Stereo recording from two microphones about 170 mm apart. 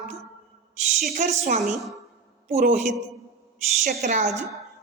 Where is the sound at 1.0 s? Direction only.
50° right (ahead or behind).